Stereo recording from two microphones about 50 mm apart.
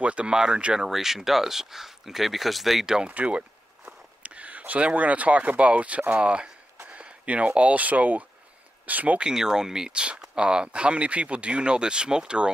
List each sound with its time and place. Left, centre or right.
0.0 s speech: right
0.8 s speech: centre
3.1 s speech: right
9.2 s speech: centre